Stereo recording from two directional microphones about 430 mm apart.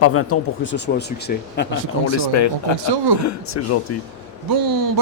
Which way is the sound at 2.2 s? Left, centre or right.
Left.